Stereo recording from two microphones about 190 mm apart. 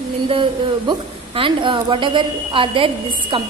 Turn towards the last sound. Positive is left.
turn(degrees=-25)  # may be behind; listen again after turning